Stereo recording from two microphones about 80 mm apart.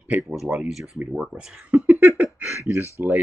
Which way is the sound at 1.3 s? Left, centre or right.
Centre.